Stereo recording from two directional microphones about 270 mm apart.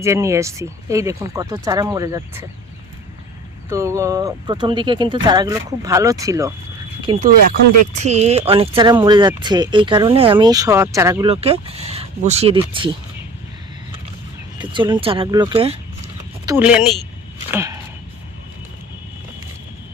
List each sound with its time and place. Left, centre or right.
0.0 s speech: centre
3.7 s speech: centre
14.6 s speech: centre
16.5 s speech: centre
17.5 s a sound: centre